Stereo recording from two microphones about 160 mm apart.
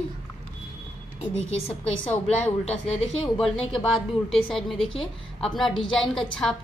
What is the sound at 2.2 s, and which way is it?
A man's voice, 40° left (ahead or behind).